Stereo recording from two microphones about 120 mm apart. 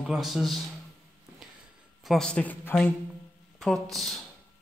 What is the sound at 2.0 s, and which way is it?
Speech, 5° left (ahead or behind).